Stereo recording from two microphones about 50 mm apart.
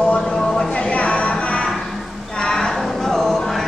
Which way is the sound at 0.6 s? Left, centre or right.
Left.